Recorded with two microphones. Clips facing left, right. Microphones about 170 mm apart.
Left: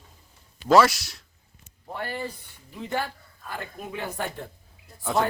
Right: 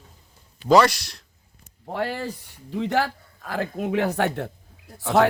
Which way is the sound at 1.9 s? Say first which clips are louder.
Right 5 dB; 85° right.